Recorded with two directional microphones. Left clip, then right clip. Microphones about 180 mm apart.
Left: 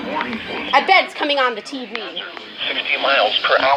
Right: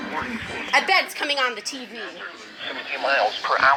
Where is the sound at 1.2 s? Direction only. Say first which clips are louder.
Left 5 dB; 25° left (ahead or behind).